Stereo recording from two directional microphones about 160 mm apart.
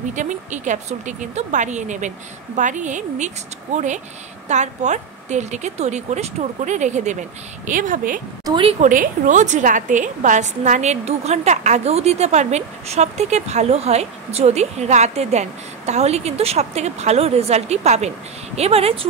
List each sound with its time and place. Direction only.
0.1 s a woman's voice: 50° right (ahead or behind)
8.5 s speech: 30° right (ahead or behind)
8.8 s a woman's voice: 55° right (ahead or behind); by 18.9 s 40° right (ahead or behind)